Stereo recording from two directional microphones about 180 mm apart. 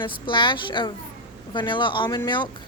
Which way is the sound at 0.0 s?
25° left (ahead or behind).